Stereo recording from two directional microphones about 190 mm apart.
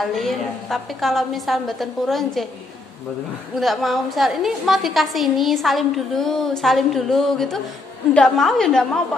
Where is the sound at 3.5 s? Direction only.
Centre (ahead or behind).